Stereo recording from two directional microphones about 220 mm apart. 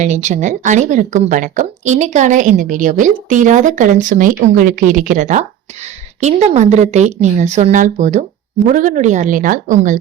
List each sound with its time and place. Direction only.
0.0 s speech: 30° right (ahead or behind)